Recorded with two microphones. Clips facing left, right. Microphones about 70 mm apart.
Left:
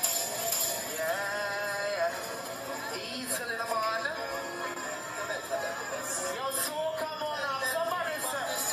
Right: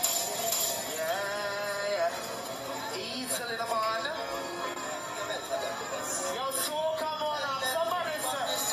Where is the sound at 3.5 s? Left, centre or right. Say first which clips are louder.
Right 1 dB; left.